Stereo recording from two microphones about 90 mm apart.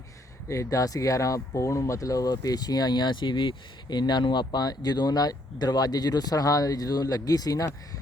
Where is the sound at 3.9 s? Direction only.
55° left (ahead or behind).